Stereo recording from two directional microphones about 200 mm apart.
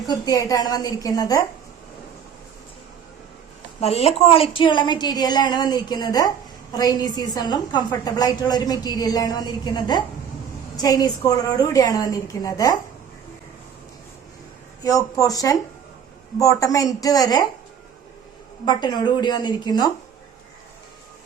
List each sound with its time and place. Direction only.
0.1 s a woman's voice: 20° left (ahead or behind)
3.8 s a woman's voice: 30° left (ahead or behind)
14.8 s a woman's voice: 15° left (ahead or behind)
18.6 s a woman's voice: 20° left (ahead or behind)